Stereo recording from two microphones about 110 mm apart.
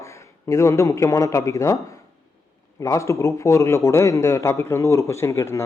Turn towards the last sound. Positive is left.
turn(degrees=25)  # may be behind; listen again after turning